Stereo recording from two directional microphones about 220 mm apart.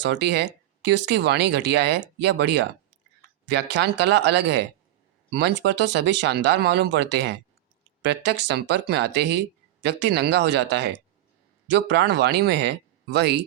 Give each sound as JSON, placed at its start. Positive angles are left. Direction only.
{"t": 0.0, "sound": "speech", "side_deg": -50}